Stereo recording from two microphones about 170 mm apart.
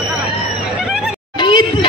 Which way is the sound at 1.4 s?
30° left (ahead or behind).